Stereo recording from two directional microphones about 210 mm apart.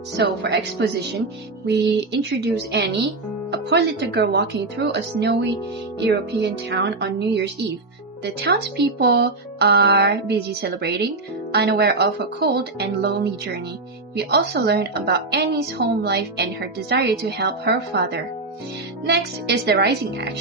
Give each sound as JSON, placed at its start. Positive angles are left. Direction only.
{"t": 0.2, "sound": "speech", "side_deg": -55}
{"t": 14.2, "sound": "speech", "side_deg": -55}